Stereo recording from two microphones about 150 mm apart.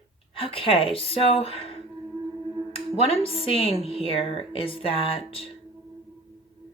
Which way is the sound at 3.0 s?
40° left (ahead or behind).